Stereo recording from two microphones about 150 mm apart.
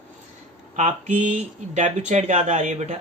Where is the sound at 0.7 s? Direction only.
55° right (ahead or behind).